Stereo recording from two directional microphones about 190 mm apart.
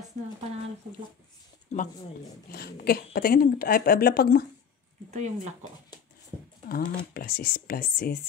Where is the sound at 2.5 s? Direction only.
55° left (ahead or behind).